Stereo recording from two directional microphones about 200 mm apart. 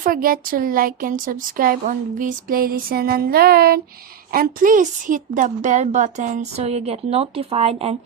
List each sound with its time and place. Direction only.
0.0 s a woman's voice: 45° right (ahead or behind)